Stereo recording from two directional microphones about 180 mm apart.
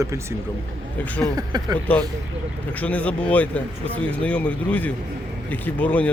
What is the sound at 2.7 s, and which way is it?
Speech, 10° left (ahead or behind).